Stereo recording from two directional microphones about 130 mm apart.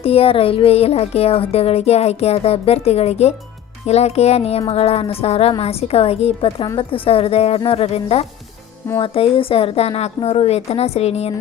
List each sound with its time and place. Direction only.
0.0 s speech: 45° left (ahead or behind)